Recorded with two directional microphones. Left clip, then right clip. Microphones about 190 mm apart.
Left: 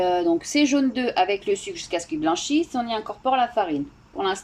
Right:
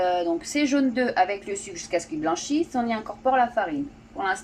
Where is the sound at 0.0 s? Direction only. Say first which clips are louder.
Left 2 dB; 15° left (ahead or behind).